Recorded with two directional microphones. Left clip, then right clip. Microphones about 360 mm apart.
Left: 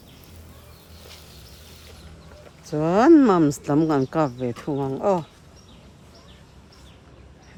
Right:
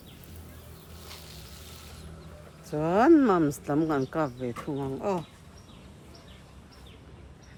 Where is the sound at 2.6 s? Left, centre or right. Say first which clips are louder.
Left 5 dB; left.